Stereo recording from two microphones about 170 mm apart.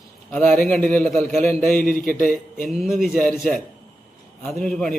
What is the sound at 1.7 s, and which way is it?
Speech, 55° left (ahead or behind).